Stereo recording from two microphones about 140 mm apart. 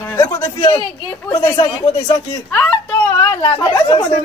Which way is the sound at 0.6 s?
35° left (ahead or behind).